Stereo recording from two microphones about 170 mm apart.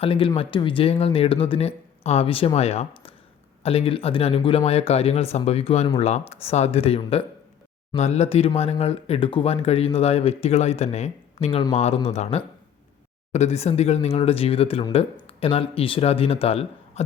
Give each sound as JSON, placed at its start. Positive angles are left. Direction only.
{"t": 0.0, "sound": "speech", "side_deg": 30}